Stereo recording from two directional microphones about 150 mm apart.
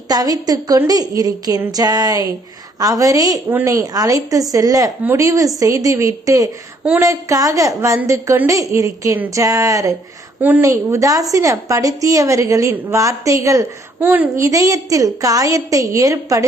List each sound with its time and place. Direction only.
0.1 s a woman's voice: 25° right (ahead or behind)